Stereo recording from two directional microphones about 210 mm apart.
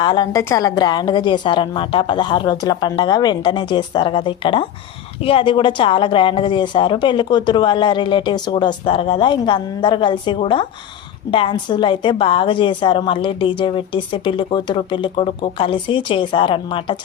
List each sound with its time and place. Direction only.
0.0 s a woman's voice: 20° left (ahead or behind)